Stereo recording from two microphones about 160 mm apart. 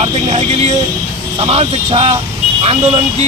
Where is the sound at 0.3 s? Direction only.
45° right (ahead or behind).